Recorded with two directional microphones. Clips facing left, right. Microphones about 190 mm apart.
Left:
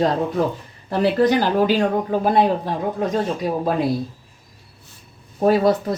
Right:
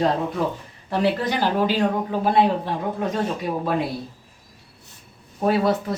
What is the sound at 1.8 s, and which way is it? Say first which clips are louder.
A man's voice: left 3 dB; 45° left (ahead or behind).